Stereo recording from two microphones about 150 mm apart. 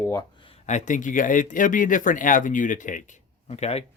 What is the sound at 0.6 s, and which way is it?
Speech, 55° left (ahead or behind).